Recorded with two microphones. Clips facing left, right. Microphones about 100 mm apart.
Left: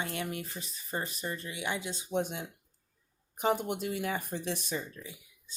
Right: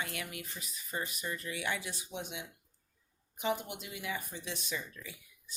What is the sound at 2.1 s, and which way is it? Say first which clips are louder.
Speech: left 12 dB; 45° left (ahead or behind).